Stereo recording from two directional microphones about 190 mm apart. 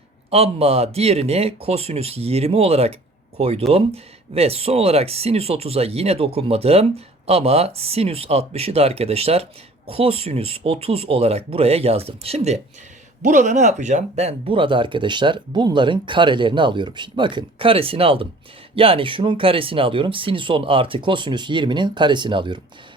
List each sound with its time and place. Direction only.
0.3 s speech: 30° right (ahead or behind)